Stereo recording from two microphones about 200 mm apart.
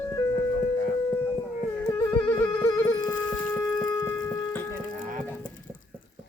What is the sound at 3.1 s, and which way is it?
Shofar, 10° left (ahead or behind).